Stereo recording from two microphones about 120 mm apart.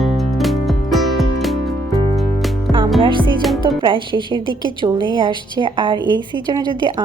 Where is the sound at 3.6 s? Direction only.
45° right (ahead or behind).